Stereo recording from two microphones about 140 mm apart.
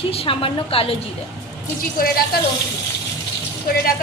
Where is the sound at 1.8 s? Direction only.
90° left.